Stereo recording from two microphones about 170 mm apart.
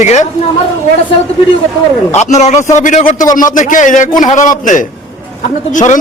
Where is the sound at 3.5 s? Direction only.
50° left (ahead or behind).